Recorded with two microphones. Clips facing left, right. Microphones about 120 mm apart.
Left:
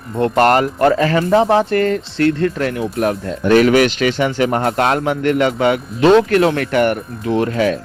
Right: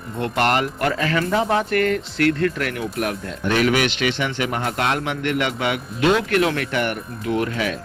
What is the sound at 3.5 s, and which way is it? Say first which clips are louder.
Speech: left 8 dB; 45° left (ahead or behind).